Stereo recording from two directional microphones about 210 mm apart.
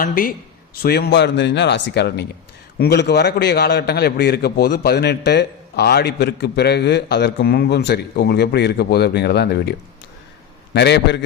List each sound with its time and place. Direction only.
0.0 s a man's voice: 45° left (ahead or behind)
10.8 s a man's voice: 55° left (ahead or behind)